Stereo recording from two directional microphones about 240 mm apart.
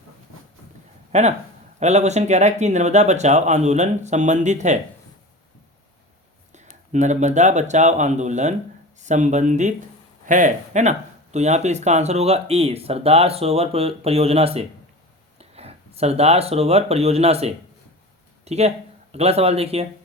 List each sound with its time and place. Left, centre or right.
1.1 s speech: right
6.9 s speech: right